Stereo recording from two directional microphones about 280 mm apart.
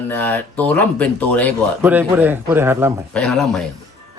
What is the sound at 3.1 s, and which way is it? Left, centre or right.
Speech, centre.